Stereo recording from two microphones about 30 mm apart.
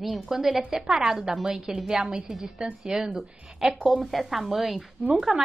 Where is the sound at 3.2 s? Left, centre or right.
Centre.